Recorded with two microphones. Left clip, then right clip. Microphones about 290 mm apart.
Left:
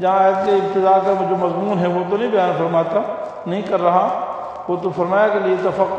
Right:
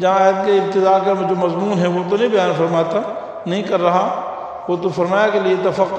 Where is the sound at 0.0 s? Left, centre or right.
Right.